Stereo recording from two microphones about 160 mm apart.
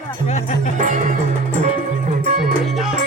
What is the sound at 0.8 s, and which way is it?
Speech, 55° right (ahead or behind).